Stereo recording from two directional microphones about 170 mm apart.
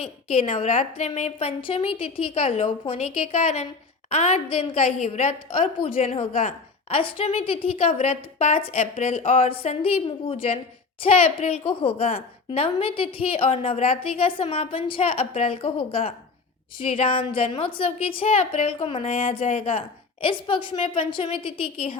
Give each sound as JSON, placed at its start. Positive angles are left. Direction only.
{"t": 0.0, "sound": "a woman's voice", "side_deg": 35}
{"t": 4.1, "sound": "a woman's voice", "side_deg": 40}
{"t": 6.9, "sound": "a woman's voice", "side_deg": 30}
{"t": 9.2, "sound": "a woman's voice", "side_deg": 35}
{"t": 20.2, "sound": "a woman's voice", "side_deg": 30}